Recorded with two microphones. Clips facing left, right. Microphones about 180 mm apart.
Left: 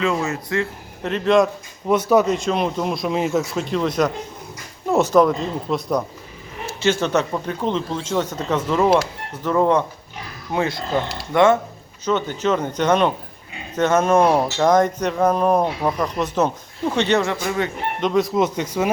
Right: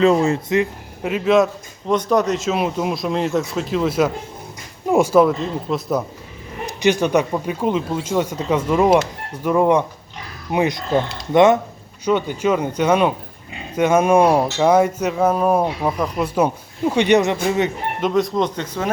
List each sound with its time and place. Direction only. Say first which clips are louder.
0.0 s speech: right 7 dB; 35° right (ahead or behind)
0.5 s speech: right 5 dB; 10° right (ahead or behind)
1.9 s speech: left 1 dB; 5° left (ahead or behind)
6.7 s speech: right 3 dB; 15° right (ahead or behind)
18.0 s speech: even; centre (ahead or behind)